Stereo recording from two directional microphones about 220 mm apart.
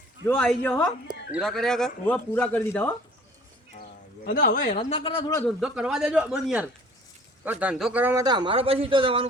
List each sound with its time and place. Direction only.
0.3 s speech: 10° left (ahead or behind)
3.8 s a sound: 45° left (ahead or behind)
4.8 s speech: 25° left (ahead or behind)
5.5 s a man's voice: 5° right (ahead or behind); by 9.2 s 25° right (ahead or behind)